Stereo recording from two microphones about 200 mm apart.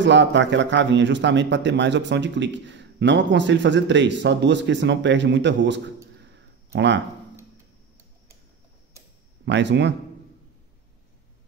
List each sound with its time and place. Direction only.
0.0 s a man's voice: 65° right (ahead or behind)
6.3 s a sound: 60° right (ahead or behind)
9.4 s a man's voice: 60° right (ahead or behind)